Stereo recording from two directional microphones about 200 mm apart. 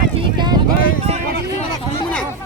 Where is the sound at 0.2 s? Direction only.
20° right (ahead or behind).